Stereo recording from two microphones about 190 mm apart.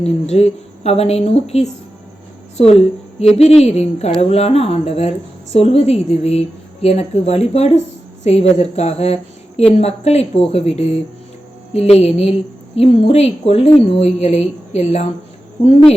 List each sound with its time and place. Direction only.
0.0 s speech: 35° left (ahead or behind)